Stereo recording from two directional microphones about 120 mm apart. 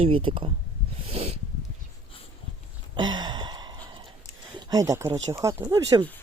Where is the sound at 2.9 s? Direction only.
35° right (ahead or behind).